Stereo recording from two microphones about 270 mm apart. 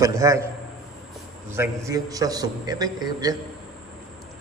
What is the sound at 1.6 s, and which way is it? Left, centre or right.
A man's voice, centre.